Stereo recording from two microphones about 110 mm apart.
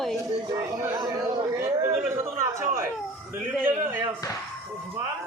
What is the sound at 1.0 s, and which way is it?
Speech, 30° right (ahead or behind).